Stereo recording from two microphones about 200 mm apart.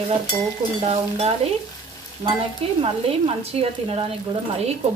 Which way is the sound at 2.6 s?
30° right (ahead or behind).